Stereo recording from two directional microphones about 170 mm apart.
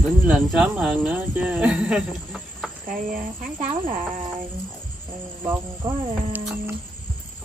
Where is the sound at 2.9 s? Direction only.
50° right (ahead or behind).